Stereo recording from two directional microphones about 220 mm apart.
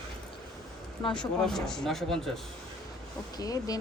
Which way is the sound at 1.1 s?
5° left (ahead or behind).